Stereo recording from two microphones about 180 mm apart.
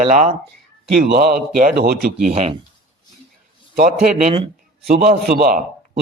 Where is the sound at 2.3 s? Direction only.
35° right (ahead or behind).